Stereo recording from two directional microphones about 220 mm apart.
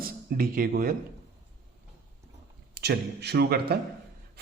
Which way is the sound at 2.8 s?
50° right (ahead or behind).